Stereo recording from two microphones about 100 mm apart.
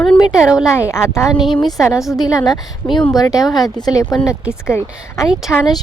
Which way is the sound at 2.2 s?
40° left (ahead or behind).